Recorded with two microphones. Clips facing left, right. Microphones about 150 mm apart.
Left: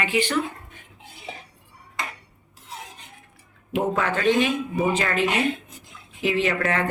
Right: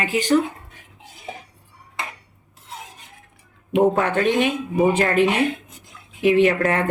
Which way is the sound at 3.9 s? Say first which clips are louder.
Right 2 dB; 50° right (ahead or behind).